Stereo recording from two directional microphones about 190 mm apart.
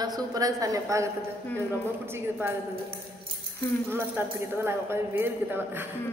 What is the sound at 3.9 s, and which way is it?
Speech, 10° right (ahead or behind).